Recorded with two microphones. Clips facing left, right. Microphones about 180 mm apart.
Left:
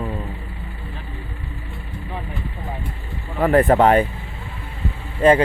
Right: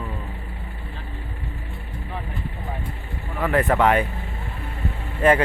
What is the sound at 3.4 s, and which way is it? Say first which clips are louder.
Speech: left 5 dB; 35° left (ahead or behind).